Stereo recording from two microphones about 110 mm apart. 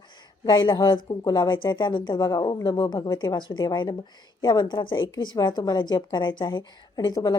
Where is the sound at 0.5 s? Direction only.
45° left (ahead or behind).